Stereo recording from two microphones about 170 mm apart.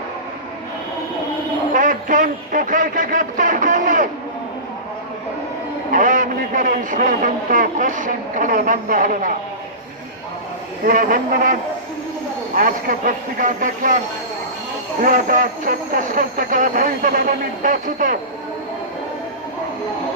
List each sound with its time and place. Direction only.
1.7 s a man's voice: 50° right (ahead or behind)
5.9 s a man's voice: 50° right (ahead or behind)
10.8 s speech: 55° right (ahead or behind)
12.5 s a man's voice: 55° right (ahead or behind)
15.0 s a man's voice: 50° right (ahead or behind)